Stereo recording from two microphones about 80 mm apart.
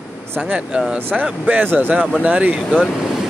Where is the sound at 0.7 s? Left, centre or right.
Centre.